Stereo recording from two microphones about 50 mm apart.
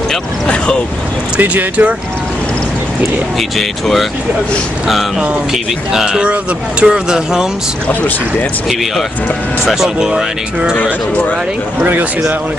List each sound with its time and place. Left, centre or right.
1.4 s speech: right
3.3 s speech: centre
5.5 s speech: centre
9.8 s speech: centre
11.8 s speech: right